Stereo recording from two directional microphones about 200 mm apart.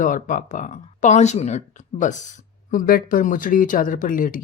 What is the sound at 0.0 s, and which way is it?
Speech, 40° left (ahead or behind).